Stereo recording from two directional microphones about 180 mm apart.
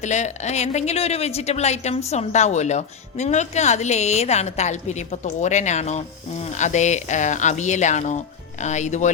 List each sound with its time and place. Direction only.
0.0 s a woman's voice: 40° left (ahead or behind)